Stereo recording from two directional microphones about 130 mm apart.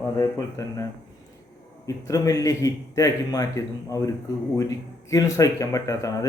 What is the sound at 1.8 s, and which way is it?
Speech, 25° left (ahead or behind).